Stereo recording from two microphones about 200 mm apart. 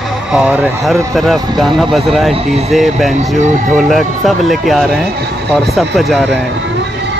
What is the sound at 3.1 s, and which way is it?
Speech, 35° right (ahead or behind).